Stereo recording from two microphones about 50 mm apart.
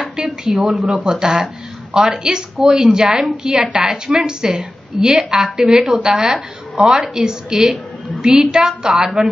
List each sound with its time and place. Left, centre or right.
0.1 s speech: centre
0.8 s a woman's voice: centre